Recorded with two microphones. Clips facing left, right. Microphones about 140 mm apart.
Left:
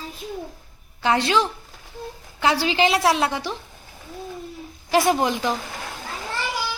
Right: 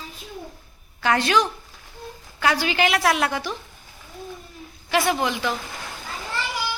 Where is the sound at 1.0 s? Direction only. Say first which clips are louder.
Even; 25° left (ahead or behind).